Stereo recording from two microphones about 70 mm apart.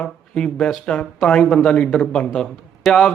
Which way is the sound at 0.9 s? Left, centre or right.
Centre.